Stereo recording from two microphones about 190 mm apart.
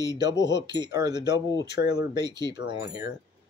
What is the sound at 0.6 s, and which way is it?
Speech, 20° right (ahead or behind).